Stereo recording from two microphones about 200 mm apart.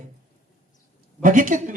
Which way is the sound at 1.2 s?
40° right (ahead or behind).